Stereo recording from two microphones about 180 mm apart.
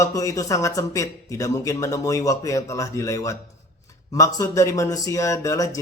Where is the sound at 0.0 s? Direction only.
20° left (ahead or behind).